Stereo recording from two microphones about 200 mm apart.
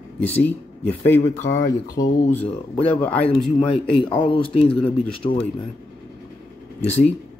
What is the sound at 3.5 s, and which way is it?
Speech, 25° left (ahead or behind).